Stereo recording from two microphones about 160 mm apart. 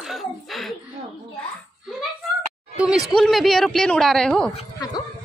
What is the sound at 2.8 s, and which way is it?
Speech, 5° right (ahead or behind).